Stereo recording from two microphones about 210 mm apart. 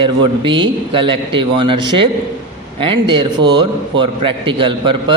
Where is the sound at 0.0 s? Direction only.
25° right (ahead or behind).